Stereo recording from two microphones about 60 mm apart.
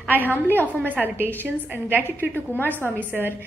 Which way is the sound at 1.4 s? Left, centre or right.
Right.